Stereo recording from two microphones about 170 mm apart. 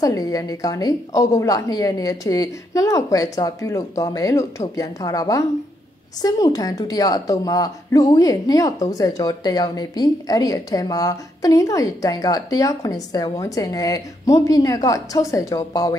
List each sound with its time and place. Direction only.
0.0 s a woman's voice: 20° left (ahead or behind)